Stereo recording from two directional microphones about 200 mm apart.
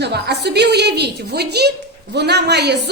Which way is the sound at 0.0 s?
55° right (ahead or behind).